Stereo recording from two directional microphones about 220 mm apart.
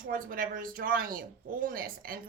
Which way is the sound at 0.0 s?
40° right (ahead or behind).